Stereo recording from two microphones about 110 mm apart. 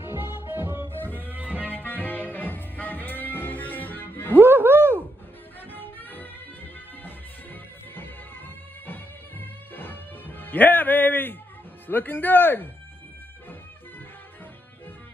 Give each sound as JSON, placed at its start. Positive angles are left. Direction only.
{"t": 0.6, "sound": "music", "side_deg": -20}
{"t": 0.9, "sound": "music", "side_deg": 15}
{"t": 1.3, "sound": "music", "side_deg": -10}
{"t": 1.6, "sound": "music", "side_deg": 15}
{"t": 4.4, "sound": "a sound", "side_deg": -20}
{"t": 5.7, "sound": "music", "side_deg": 15}
{"t": 8.8, "sound": "music", "side_deg": 20}
{"t": 11.9, "sound": "speech", "side_deg": 15}